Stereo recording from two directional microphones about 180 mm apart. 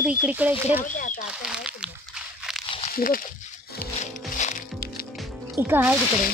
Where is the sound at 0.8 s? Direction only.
45° left (ahead or behind).